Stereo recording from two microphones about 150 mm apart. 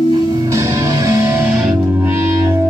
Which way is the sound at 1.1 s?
15° right (ahead or behind).